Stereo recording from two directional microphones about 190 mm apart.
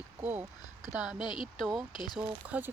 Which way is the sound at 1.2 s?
25° left (ahead or behind).